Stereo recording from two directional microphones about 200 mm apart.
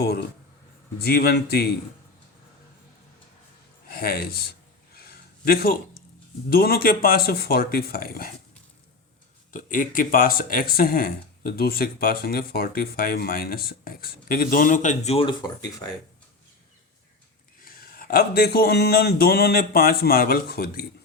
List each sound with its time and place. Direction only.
0.0 s speech: 55° left (ahead or behind)
3.8 s speech: 50° left (ahead or behind)
4.9 s a sound: 50° left (ahead or behind)
6.5 s speech: 50° left (ahead or behind)
9.5 s speech: 40° left (ahead or behind); by 15.5 s 20° left (ahead or behind)
17.6 s speech: 45° left (ahead or behind)